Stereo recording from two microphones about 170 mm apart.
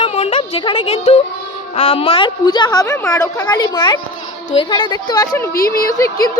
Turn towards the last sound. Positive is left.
turn(degrees=20)  # may be behind; listen again after turning